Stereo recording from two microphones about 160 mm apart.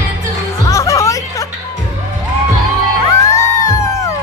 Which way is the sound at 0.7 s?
20° left (ahead or behind).